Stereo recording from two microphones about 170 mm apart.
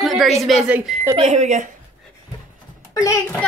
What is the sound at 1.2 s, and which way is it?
Speech, 40° right (ahead or behind).